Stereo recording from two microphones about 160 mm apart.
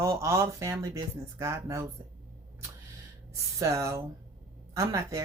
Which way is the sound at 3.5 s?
20° right (ahead or behind).